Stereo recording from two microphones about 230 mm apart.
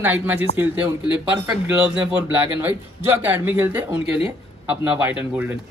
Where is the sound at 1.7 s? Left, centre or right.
Centre.